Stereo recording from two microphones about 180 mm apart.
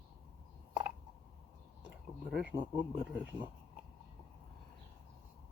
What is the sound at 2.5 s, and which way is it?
Speech, 25° right (ahead or behind).